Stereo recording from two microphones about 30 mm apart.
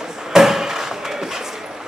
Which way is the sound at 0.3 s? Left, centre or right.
Centre.